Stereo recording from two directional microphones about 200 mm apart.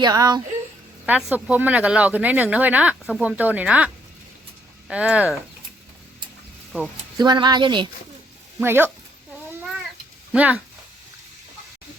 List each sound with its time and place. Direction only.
0.0 s speech: 20° right (ahead or behind)
1.0 s speech: 10° right (ahead or behind)
7.2 s speech: 20° right (ahead or behind)
8.6 s speech: 10° right (ahead or behind)
9.5 s cat: 10° right (ahead or behind)
10.3 s speech: 5° right (ahead or behind)